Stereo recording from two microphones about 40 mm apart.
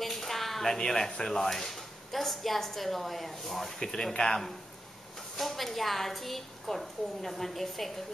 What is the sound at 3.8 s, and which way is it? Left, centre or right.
Speech, centre.